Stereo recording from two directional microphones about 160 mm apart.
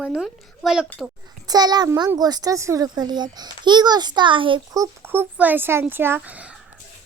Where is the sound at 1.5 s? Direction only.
25° right (ahead or behind); by 6.6 s 10° right (ahead or behind).